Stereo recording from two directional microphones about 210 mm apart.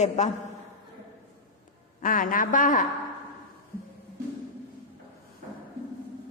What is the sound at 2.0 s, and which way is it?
Speech, 40° left (ahead or behind).